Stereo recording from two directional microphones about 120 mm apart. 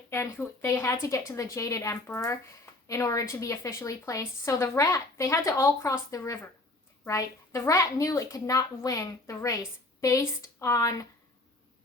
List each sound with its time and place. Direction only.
0.1 s a woman's voice: 20° left (ahead or behind)